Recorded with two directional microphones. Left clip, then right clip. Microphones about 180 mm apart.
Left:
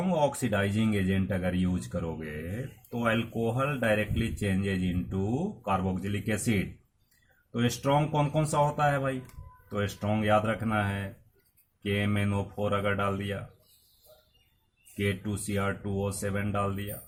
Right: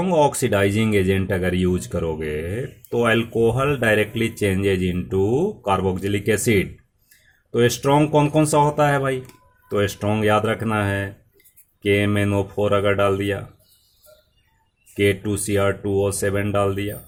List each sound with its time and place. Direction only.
0.0 s speech: 50° right (ahead or behind)
14.9 s speech: 50° right (ahead or behind)